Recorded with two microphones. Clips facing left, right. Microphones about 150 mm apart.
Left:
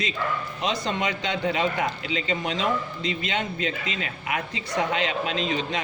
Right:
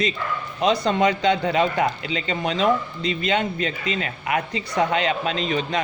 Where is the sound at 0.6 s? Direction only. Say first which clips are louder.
Right 8 dB; 65° right (ahead or behind).